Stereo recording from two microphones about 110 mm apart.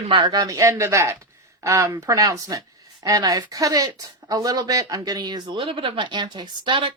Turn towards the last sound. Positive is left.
turn(degrees=-50)  # may be behind; listen again after turning